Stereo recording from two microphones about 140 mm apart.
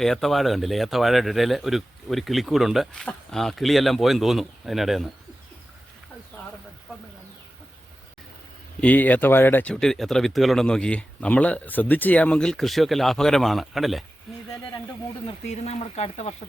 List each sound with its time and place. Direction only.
0.0 s speech: centre (ahead or behind)
8.8 s speech: 10° left (ahead or behind)
9.8 s speech: 5° left (ahead or behind)
14.3 s a sound: centre (ahead or behind)
15.3 s speech: 45° left (ahead or behind)